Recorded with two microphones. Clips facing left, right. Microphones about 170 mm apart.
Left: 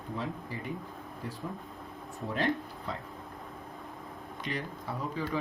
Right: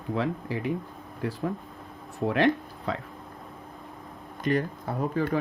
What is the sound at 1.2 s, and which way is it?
Speech, 70° right (ahead or behind).